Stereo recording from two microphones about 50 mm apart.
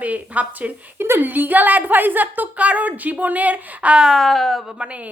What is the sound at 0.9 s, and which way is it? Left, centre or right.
Speech, right.